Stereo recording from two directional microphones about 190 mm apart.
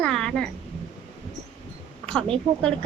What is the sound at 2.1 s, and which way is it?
Speech, 25° right (ahead or behind).